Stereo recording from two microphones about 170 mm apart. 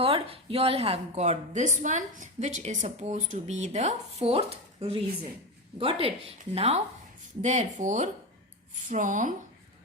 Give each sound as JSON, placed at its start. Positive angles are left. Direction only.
{"t": 0.0, "sound": "a woman's voice", "side_deg": -35}